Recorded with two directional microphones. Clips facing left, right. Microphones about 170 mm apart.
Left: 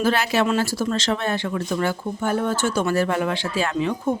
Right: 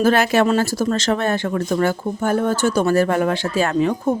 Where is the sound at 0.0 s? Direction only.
50° right (ahead or behind).